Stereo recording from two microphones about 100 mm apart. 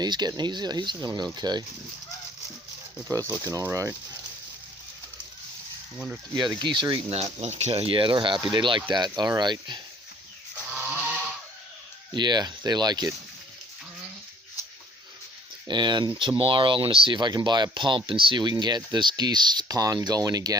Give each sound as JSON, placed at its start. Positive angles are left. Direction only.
{"t": 0.0, "sound": "speech", "side_deg": -45}
{"t": 3.1, "sound": "speech", "side_deg": -35}
{"t": 6.6, "sound": "speech", "side_deg": -50}
{"t": 7.1, "sound": "speech", "side_deg": -90}
{"t": 9.0, "sound": "speech", "side_deg": -40}
{"t": 10.7, "sound": "goat", "side_deg": -15}
{"t": 12.1, "sound": "speech", "side_deg": -45}
{"t": 15.6, "sound": "speech", "side_deg": -50}